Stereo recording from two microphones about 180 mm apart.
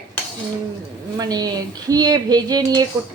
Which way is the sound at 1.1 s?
20° right (ahead or behind).